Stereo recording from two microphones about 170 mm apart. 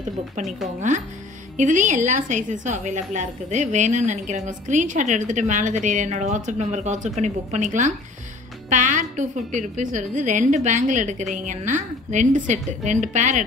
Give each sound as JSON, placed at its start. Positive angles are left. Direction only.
{"t": 1.6, "sound": "a woman's voice", "side_deg": -45}